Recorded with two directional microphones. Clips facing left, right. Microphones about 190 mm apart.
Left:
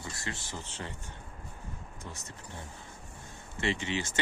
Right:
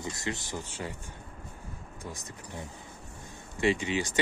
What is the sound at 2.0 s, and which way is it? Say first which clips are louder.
Speech: right 5 dB; 15° right (ahead or behind).